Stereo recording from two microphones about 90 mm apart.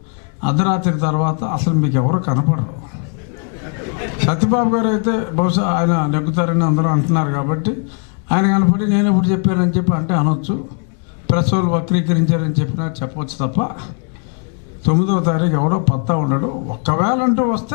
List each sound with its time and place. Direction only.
0.4 s a man's voice: 15° left (ahead or behind)
14.8 s a man's voice: 15° left (ahead or behind)